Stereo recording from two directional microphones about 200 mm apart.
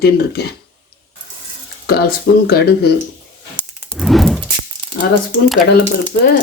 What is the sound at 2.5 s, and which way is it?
Speech, 55° left (ahead or behind).